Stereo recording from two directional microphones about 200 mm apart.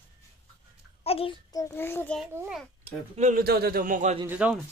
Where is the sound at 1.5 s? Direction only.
15° left (ahead or behind).